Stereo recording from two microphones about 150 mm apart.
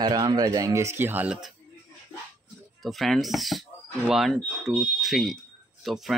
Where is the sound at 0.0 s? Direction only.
30° right (ahead or behind); by 1.5 s 5° right (ahead or behind).